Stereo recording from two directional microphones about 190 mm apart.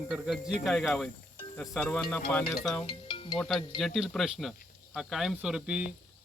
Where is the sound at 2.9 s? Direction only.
25° left (ahead or behind).